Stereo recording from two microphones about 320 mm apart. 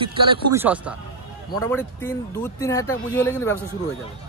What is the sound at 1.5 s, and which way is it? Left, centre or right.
Music, centre.